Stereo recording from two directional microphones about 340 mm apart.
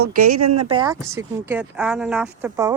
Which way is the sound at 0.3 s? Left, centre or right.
Right.